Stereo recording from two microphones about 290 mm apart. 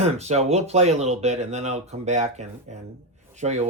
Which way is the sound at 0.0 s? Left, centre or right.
Right.